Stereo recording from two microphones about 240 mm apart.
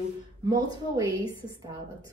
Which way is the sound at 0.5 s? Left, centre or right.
Centre.